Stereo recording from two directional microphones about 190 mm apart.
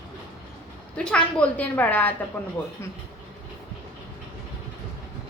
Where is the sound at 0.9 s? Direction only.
5° left (ahead or behind).